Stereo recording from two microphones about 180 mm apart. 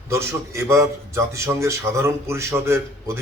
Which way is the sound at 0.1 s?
15° right (ahead or behind).